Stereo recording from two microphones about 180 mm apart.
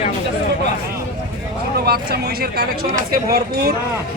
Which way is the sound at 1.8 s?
60° right (ahead or behind).